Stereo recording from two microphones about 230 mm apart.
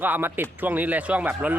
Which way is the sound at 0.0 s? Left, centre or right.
Centre.